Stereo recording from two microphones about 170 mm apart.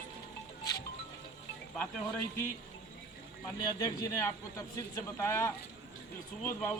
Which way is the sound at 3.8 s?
20° left (ahead or behind).